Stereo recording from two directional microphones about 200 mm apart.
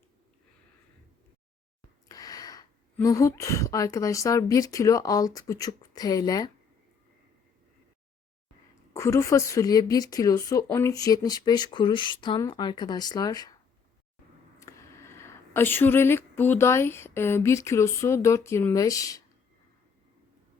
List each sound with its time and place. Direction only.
2.0 s speech: 20° left (ahead or behind)
8.9 s a woman's voice: 15° left (ahead or behind)
14.6 s a sound: 15° left (ahead or behind)